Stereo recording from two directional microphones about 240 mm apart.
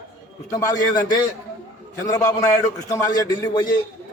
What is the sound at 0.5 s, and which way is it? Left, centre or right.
A man's voice, centre.